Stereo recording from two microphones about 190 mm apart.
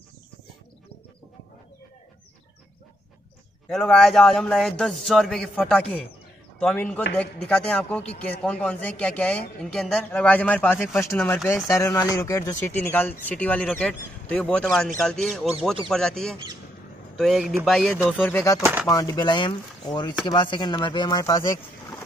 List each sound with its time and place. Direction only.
3.6 s a man's voice: 5° left (ahead or behind)
11.4 s a man's voice: 15° left (ahead or behind); by 18.2 s centre (ahead or behind)
18.2 s speech: 15° left (ahead or behind)
18.6 s speech: 10° right (ahead or behind)
18.9 s speech: 20° left (ahead or behind)